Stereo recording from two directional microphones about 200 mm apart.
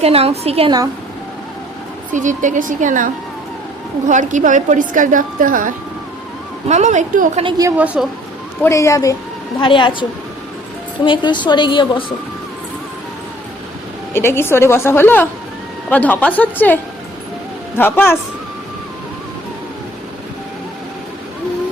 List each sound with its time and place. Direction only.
0.0 s a woman's voice: 30° right (ahead or behind)
2.1 s a woman's voice: 40° right (ahead or behind)
7.8 s a woman's voice: 5° right (ahead or behind)
8.6 s a woman's voice: 15° left (ahead or behind)
14.1 s a woman's voice: 10° left (ahead or behind)